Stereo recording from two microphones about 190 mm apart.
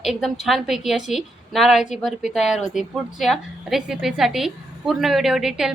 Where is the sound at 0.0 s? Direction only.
Centre (ahead or behind).